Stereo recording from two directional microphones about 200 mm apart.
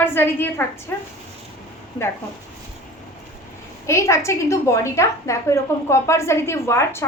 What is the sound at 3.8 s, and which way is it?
A woman's voice, 15° left (ahead or behind).